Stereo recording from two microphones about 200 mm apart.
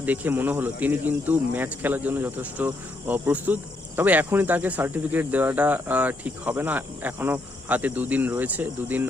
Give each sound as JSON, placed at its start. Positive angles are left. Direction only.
{"t": 0.0, "sound": "speech", "side_deg": -10}